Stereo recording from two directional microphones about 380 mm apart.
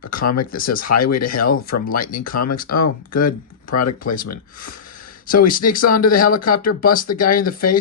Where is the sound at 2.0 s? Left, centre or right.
Left.